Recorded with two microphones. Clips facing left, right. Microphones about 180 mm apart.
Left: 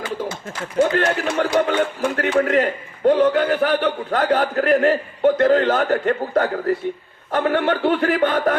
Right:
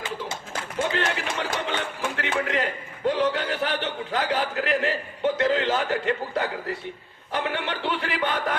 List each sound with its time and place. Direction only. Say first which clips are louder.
0.8 s a man's voice: left 9 dB; 50° left (ahead or behind)